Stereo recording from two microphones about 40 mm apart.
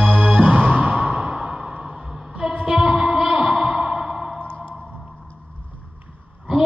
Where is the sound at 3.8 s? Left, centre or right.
Centre.